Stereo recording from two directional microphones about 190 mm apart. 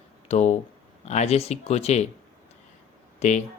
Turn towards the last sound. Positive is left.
turn(degrees=40)  # may be behind; listen again after turning